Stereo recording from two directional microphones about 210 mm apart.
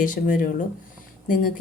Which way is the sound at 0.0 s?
40° left (ahead or behind).